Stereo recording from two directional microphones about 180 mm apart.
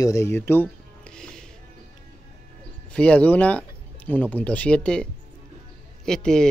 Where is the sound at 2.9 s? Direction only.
5° left (ahead or behind).